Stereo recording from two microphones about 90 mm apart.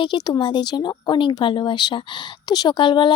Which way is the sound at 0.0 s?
55° left (ahead or behind).